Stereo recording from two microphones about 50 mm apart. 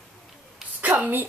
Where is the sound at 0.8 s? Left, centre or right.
Right.